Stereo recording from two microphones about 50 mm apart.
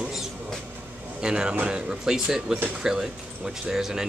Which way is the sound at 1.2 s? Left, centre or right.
Centre.